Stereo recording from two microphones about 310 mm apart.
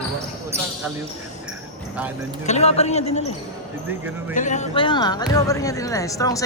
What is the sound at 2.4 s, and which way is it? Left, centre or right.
Speech, left.